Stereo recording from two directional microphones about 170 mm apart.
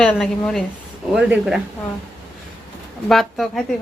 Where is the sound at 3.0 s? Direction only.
Centre (ahead or behind).